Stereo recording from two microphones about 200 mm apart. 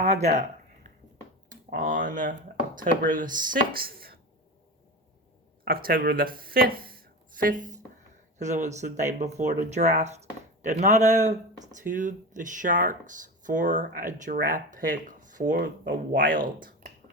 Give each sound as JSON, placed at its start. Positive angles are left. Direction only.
{"t": 0.0, "sound": "speech", "side_deg": -35}
{"t": 1.5, "sound": "speech", "side_deg": -40}
{"t": 5.6, "sound": "speech", "side_deg": -50}